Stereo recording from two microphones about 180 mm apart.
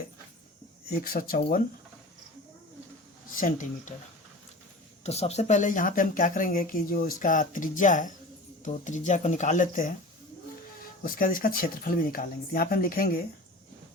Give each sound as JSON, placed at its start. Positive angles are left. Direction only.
{"t": 1.0, "sound": "speech", "side_deg": 55}
{"t": 3.3, "sound": "a woman's voice", "side_deg": 45}
{"t": 5.0, "sound": "a woman's voice", "side_deg": 35}
{"t": 11.0, "sound": "a woman's voice", "side_deg": 50}